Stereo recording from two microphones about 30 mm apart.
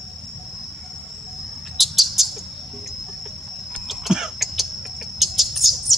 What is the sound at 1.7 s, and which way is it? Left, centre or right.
Bird, centre.